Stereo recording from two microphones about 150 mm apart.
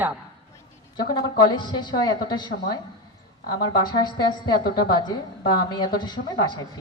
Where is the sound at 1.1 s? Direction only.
30° left (ahead or behind).